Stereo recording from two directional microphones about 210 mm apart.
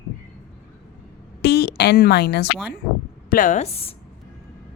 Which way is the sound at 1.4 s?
50° left (ahead or behind).